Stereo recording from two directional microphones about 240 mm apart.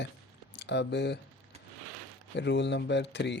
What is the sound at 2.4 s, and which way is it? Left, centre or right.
Speech, left.